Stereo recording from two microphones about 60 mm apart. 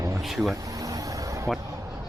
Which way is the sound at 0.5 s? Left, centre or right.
Right.